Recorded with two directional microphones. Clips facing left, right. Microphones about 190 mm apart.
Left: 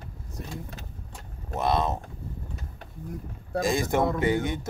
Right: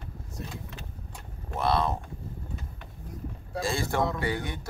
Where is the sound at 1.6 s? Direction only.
20° left (ahead or behind).